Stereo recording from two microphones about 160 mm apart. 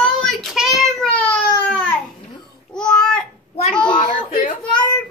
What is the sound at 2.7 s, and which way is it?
Babbling, 5° left (ahead or behind).